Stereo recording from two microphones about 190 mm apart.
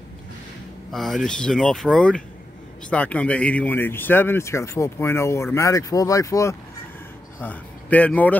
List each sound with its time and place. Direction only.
0.9 s speech: centre (ahead or behind)